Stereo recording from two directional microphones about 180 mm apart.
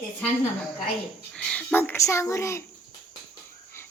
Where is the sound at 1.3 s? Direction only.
10° left (ahead or behind).